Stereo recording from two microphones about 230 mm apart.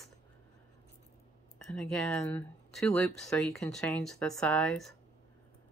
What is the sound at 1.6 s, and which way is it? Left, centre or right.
Speech, centre.